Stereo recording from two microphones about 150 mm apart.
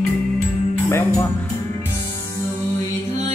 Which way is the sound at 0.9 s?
15° left (ahead or behind).